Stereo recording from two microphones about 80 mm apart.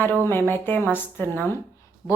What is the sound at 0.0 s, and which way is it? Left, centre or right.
Speech, left.